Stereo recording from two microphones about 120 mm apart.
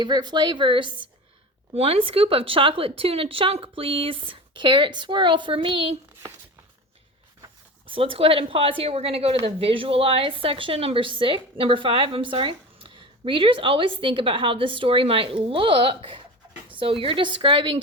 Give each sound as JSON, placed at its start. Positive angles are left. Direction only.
{"t": 0.0, "sound": "speech", "side_deg": -35}
{"t": 1.7, "sound": "a woman's voice", "side_deg": -55}
{"t": 7.9, "sound": "a woman's voice", "side_deg": -50}